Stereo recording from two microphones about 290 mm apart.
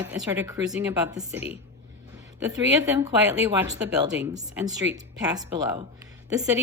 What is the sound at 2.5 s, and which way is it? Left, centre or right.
A woman's voice, centre.